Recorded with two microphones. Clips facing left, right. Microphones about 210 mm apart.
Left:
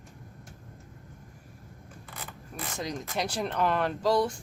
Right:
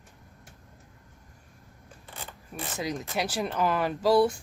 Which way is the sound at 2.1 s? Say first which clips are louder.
Right 2 dB; 30° right (ahead or behind).